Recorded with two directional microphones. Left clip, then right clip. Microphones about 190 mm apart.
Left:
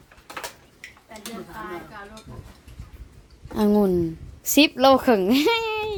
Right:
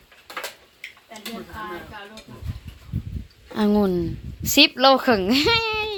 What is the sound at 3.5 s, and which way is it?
A woman's voice, 25° left (ahead or behind).